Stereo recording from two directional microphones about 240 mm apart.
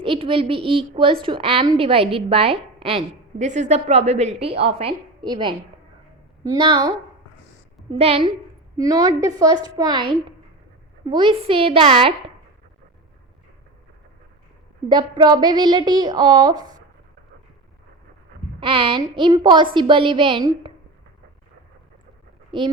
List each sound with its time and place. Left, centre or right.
0.0 s a woman's voice: right
7.9 s a woman's voice: right
14.8 s speech: centre
18.6 s a woman's voice: right
22.5 s a woman's voice: right